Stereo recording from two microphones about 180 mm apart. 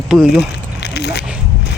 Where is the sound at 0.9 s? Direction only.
70° left (ahead or behind).